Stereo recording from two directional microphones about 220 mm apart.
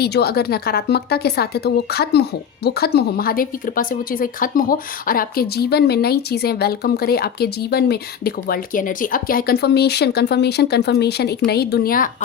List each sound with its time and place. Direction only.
0.0 s speech: 45° left (ahead or behind)